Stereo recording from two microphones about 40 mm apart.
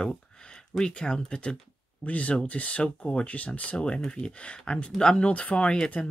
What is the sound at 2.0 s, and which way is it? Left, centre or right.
Speech, left.